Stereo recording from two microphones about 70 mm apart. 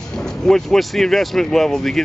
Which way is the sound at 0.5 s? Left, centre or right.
Centre.